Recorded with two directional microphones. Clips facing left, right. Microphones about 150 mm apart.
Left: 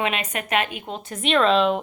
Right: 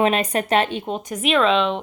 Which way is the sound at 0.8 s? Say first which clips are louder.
Right 6 dB; 15° right (ahead or behind).